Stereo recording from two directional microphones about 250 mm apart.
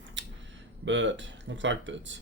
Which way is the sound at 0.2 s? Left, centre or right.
Right.